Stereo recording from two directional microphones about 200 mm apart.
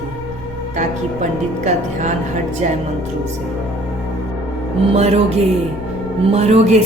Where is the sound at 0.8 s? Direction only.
35° right (ahead or behind).